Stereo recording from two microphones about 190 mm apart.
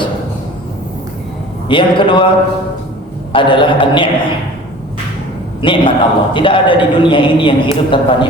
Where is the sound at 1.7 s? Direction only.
25° left (ahead or behind).